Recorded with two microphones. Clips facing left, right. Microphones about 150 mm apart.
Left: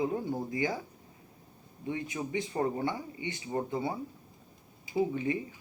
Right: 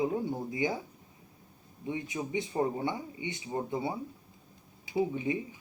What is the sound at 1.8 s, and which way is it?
Speech, 15° right (ahead or behind).